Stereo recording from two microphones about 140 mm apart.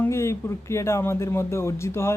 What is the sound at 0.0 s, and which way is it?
Speech, 20° left (ahead or behind).